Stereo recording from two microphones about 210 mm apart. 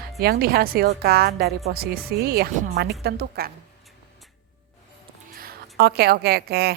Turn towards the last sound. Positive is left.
turn(degrees=-50)  # may be behind; listen again after turning